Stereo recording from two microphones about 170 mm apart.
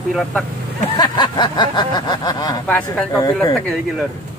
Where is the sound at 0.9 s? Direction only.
25° left (ahead or behind).